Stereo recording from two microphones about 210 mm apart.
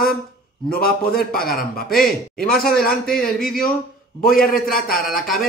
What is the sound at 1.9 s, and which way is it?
A man's voice, centre (ahead or behind).